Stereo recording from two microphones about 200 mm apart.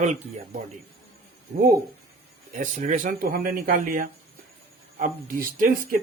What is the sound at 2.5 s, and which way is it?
Speech, 40° right (ahead or behind).